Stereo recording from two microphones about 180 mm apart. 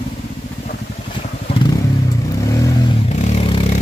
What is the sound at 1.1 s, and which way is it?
Vehicle, 30° left (ahead or behind).